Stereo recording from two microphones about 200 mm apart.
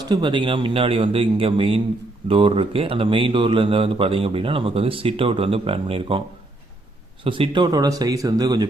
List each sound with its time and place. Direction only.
0.0 s speech: 20° right (ahead or behind)
7.3 s speech: 25° right (ahead or behind)